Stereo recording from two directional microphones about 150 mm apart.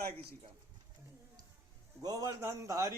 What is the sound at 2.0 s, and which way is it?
Speech, 25° right (ahead or behind).